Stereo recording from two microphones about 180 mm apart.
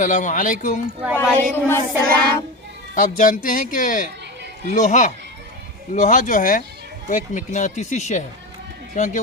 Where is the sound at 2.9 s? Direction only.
45° left (ahead or behind).